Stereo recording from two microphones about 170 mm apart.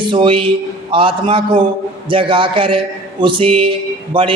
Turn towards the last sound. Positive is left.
turn(degrees=-30)  # may be behind; listen again after turning